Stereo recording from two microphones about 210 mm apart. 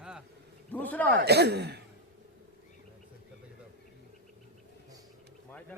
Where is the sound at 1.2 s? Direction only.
50° right (ahead or behind).